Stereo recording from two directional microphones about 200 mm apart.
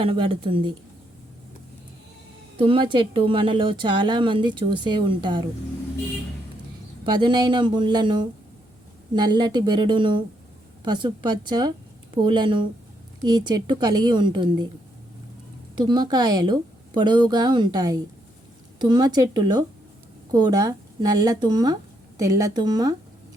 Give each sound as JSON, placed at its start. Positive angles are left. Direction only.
{"t": 0.0, "sound": "a woman's voice", "side_deg": -25}
{"t": 2.6, "sound": "a woman's voice", "side_deg": -25}
{"t": 7.0, "sound": "a woman's voice", "side_deg": -25}
{"t": 15.8, "sound": "a woman's voice", "side_deg": -20}